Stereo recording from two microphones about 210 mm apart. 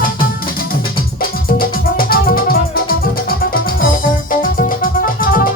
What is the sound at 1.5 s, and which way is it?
Music, 45° left (ahead or behind).